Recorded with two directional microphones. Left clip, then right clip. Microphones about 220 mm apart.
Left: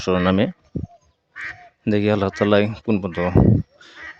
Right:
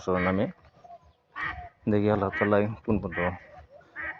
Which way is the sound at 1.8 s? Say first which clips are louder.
Left 6 dB; 50° left (ahead or behind).